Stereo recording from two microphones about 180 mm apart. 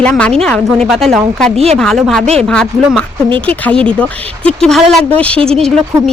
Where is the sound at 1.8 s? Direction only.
Centre (ahead or behind).